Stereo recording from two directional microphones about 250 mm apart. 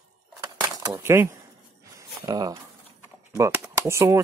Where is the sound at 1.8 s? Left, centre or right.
Centre.